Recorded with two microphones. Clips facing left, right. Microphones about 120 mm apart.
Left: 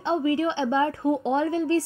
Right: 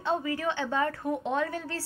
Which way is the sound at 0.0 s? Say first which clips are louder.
Left 6 dB; 25° left (ahead or behind).